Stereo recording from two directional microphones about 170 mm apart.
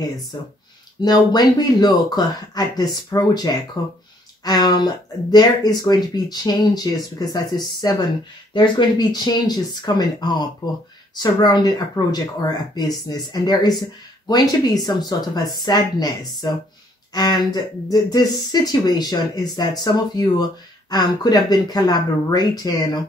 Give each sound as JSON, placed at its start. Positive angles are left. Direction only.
{"t": 1.0, "sound": "speech", "side_deg": 25}